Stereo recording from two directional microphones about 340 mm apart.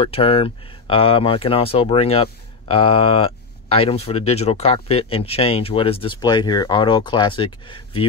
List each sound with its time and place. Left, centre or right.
0.0 s speech: centre